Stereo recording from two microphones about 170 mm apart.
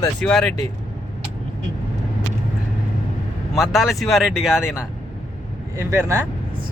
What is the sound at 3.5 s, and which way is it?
Speech, centre (ahead or behind).